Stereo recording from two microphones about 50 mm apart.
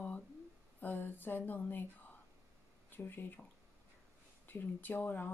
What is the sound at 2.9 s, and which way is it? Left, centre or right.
Speech, left.